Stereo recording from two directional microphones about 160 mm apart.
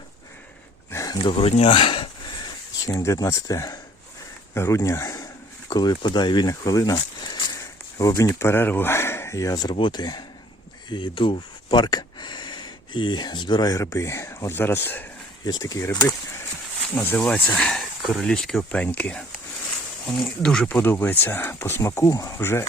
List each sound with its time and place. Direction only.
0.9 s speech: 20° left (ahead or behind)
2.8 s speech: 20° left (ahead or behind)